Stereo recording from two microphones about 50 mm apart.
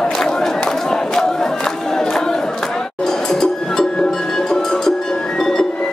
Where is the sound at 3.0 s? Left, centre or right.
Centre.